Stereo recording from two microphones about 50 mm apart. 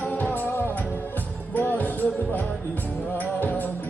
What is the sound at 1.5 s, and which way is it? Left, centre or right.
Music, left.